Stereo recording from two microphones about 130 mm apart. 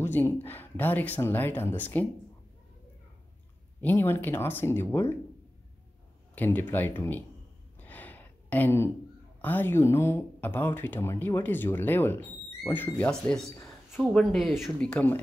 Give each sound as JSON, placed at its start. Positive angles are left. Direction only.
{"t": 0.0, "sound": "speech", "side_deg": 15}
{"t": 3.8, "sound": "speech", "side_deg": 15}
{"t": 6.3, "sound": "speech", "side_deg": 15}
{"t": 7.8, "sound": "a sound", "side_deg": 15}
{"t": 9.4, "sound": "speech", "side_deg": 15}